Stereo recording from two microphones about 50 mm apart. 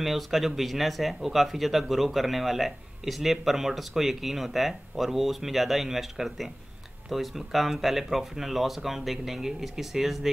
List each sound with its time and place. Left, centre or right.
0.0 s speech: centre